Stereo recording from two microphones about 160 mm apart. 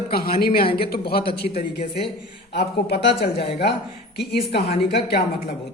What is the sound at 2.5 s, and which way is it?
Speech, 90° left.